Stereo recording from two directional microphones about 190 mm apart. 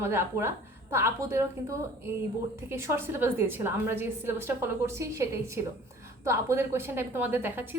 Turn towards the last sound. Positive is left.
turn(degrees=-10)  # may be behind; listen again after turning